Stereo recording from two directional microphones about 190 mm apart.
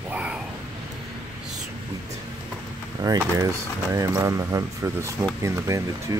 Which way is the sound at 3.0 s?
15° right (ahead or behind).